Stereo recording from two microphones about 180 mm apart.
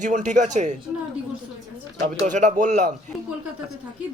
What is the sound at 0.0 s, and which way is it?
Speech, 45° right (ahead or behind).